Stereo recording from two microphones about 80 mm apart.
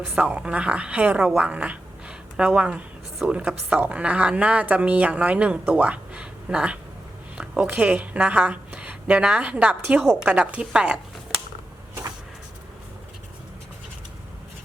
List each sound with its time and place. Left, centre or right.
0.2 s a woman's voice: centre